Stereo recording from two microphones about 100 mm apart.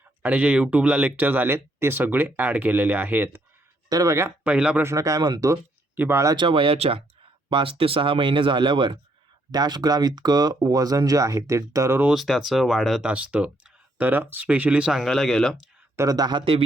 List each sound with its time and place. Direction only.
0.2 s speech: 15° right (ahead or behind)
3.8 s speech: 35° right (ahead or behind)
4.4 s speech: 10° right (ahead or behind)
4.8 s speech: 30° right (ahead or behind)
6.0 s speech: 25° right (ahead or behind)
6.3 s speech: 55° right (ahead or behind); by 7.0 s 75° right (ahead or behind)
7.5 s speech: 65° right (ahead or behind)
9.5 s speech: 45° right (ahead or behind)
12.1 s speech: centre (ahead or behind)
13.1 s speech: 10° right (ahead or behind); by 15.5 s 5° left (ahead or behind)
15.5 s speech: 40° right (ahead or behind)
16.4 s speech: 70° right (ahead or behind)